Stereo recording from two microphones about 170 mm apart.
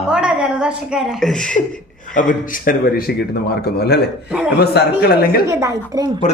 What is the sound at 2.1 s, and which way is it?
Speech, 50° left (ahead or behind).